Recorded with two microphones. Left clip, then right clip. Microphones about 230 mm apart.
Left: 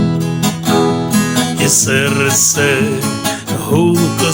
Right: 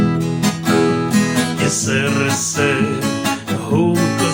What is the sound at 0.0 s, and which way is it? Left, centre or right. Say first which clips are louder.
Music: left 1 dB; left.